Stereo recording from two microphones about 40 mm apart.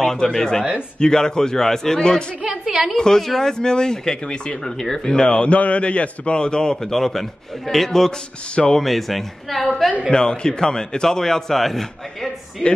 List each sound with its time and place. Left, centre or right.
0.0 s speech: centre
2.6 s a woman's voice: centre
3.0 s speech: centre
5.5 s a man's voice: left; by 9.8 s centre
10.1 s speech: left